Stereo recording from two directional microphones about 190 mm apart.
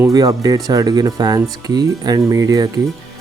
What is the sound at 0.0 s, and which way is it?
Speech, 20° right (ahead or behind).